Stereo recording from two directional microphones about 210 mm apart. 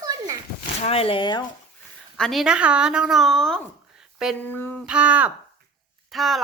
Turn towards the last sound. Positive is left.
turn(degrees=0)  # may be behind; listen again after turning